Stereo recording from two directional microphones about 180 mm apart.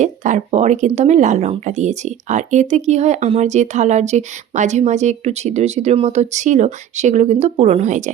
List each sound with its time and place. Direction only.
0.0 s speech: 40° right (ahead or behind)